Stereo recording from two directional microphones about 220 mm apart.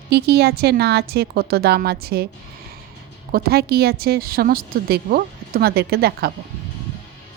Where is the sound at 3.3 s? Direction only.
45° right (ahead or behind).